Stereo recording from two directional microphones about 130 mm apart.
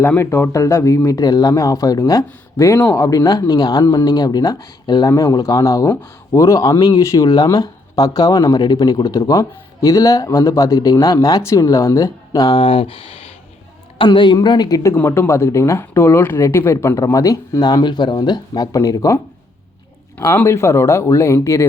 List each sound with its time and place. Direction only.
0.0 s a woman's voice: 15° left (ahead or behind)
14.9 s speech: 20° left (ahead or behind)